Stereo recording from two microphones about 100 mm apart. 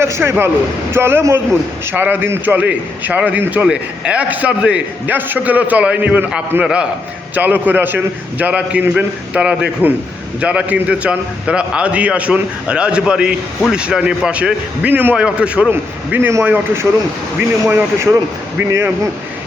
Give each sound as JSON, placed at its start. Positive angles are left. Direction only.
{"t": 0.0, "sound": "a man's voice", "side_deg": -25}